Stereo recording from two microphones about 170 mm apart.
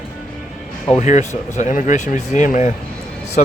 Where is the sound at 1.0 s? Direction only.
45° left (ahead or behind).